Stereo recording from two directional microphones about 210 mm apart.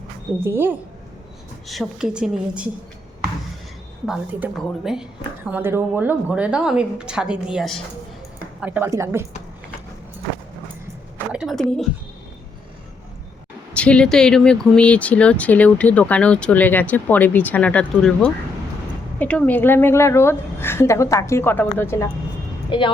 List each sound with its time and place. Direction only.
0.3 s a woman's voice: 10° right (ahead or behind)
4.0 s a woman's voice: 5° right (ahead or behind)
11.3 s a sound: centre (ahead or behind)
13.7 s a woman's voice: 5° left (ahead or behind)
22.7 s speech: 20° left (ahead or behind)